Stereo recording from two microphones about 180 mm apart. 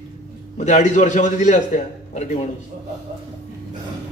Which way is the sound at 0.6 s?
40° left (ahead or behind).